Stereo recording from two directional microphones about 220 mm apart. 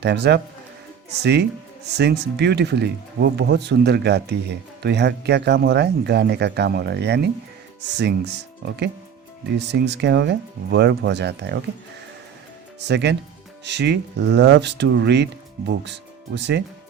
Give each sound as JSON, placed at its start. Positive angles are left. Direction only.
{"t": 0.0, "sound": "speech", "side_deg": -50}
{"t": 12.8, "sound": "speech", "side_deg": -50}